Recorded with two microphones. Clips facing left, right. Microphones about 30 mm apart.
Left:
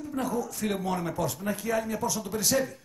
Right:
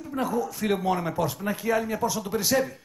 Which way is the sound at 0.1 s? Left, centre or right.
Centre.